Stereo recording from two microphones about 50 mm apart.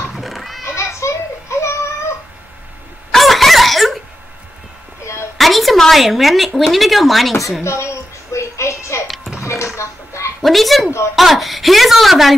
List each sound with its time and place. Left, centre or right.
0.1 s children playing: centre
0.7 s children playing: left
3.1 s chicken: centre
5.0 s a sound: left
5.4 s speech: centre
7.6 s music: left
9.0 s music: centre
9.4 s a sound: left
9.8 s music: left
10.4 s a woman's voice: centre